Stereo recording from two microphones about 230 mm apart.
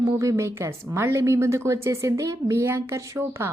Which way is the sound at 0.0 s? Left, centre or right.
Centre.